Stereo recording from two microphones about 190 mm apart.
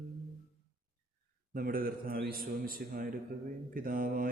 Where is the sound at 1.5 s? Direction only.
50° right (ahead or behind).